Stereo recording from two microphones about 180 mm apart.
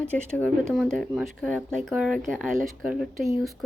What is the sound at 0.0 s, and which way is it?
Speech, 5° left (ahead or behind).